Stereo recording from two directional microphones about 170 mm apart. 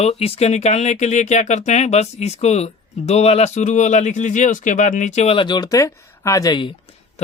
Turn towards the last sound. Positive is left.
turn(degrees=25)  # may be behind; listen again after turning